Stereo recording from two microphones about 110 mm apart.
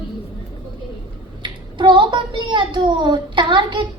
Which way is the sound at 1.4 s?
45° right (ahead or behind).